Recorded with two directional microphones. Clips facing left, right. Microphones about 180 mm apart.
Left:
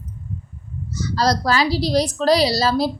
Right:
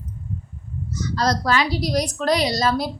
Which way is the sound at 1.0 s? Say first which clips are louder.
Left 2 dB; 35° left (ahead or behind).